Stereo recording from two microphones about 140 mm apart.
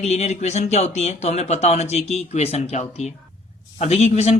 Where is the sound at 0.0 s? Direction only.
50° left (ahead or behind).